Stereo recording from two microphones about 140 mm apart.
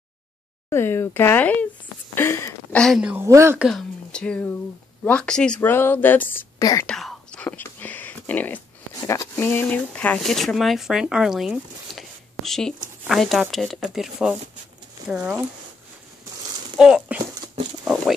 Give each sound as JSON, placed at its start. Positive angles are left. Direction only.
{"t": 0.7, "sound": "speech", "side_deg": 15}
{"t": 3.0, "sound": "speech", "side_deg": -10}
{"t": 3.3, "sound": "speech", "side_deg": -20}
{"t": 3.5, "sound": "speech", "side_deg": 0}
{"t": 6.6, "sound": "speech", "side_deg": 25}
{"t": 6.9, "sound": "whispering", "side_deg": 5}
{"t": 9.0, "sound": "speech", "side_deg": 20}
{"t": 16.7, "sound": "speech", "side_deg": -5}